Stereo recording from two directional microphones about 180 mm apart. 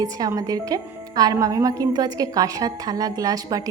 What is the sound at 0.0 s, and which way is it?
A woman's voice, 20° right (ahead or behind).